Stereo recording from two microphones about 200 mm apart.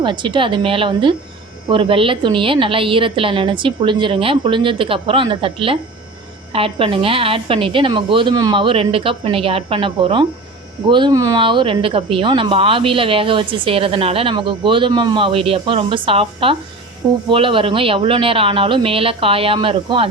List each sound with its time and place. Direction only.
0.0 s speech: 25° right (ahead or behind)